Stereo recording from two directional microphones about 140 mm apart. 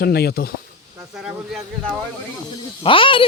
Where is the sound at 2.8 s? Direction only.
40° left (ahead or behind).